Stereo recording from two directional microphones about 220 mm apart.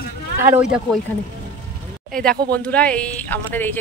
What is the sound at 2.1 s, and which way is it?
Speech, 5° left (ahead or behind).